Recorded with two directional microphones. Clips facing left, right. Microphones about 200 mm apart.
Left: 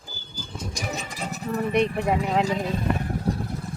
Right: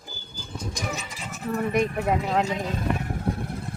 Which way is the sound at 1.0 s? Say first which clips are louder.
Left 5 dB; 40° left (ahead or behind).